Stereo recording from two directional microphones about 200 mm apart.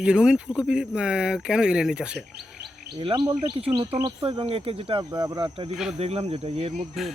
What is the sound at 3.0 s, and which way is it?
Speech, 25° right (ahead or behind).